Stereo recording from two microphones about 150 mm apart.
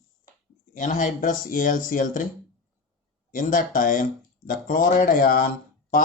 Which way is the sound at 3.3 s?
65° left (ahead or behind).